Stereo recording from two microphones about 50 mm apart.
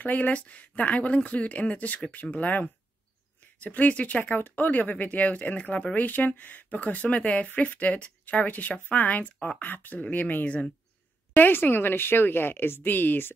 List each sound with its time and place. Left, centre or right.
0.0 s speech: left
4.2 s speech: left
11.3 s speech: left